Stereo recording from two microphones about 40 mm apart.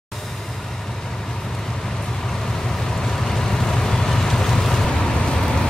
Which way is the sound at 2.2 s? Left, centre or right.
Centre.